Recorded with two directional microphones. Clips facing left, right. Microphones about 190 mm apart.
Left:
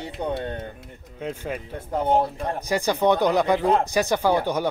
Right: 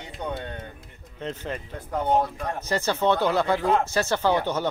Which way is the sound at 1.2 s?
10° left (ahead or behind).